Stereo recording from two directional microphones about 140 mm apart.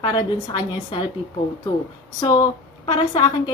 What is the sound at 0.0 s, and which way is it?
A woman's voice, 35° left (ahead or behind).